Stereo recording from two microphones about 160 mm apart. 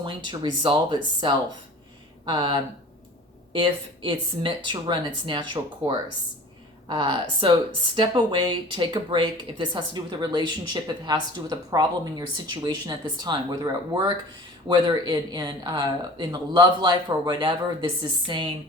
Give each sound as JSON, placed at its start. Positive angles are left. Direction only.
{"t": 0.0, "sound": "speech", "side_deg": -30}